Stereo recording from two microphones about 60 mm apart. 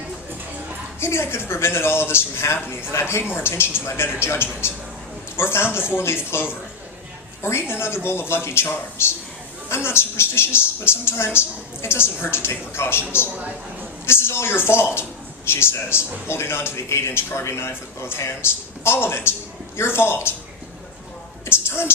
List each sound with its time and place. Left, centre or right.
0.9 s a man's voice: left
14.1 s a man's voice: left
21.4 s a sound: left